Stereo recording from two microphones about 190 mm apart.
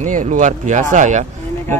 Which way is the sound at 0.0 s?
45° right (ahead or behind).